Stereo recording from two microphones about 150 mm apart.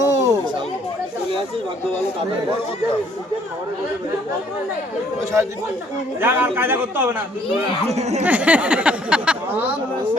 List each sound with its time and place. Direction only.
0.0 s chatter: 20° right (ahead or behind)
6.1 s speech: 15° right (ahead or behind)
7.9 s speech: 45° right (ahead or behind)
8.2 s speech: 10° right (ahead or behind)